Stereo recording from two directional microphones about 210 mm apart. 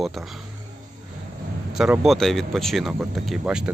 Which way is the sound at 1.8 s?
5° right (ahead or behind).